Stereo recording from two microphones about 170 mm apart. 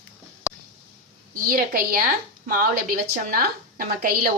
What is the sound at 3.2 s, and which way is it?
Speech, 55° right (ahead or behind).